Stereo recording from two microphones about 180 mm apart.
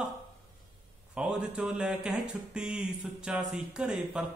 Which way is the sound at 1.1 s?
5° right (ahead or behind).